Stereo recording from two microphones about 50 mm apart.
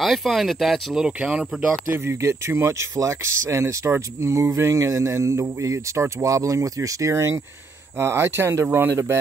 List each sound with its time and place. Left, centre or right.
0.0 s speech: centre
0.9 s speech: centre
1.7 s speech: right
8.0 s speech: right
8.6 s speech: right
8.9 s speech: right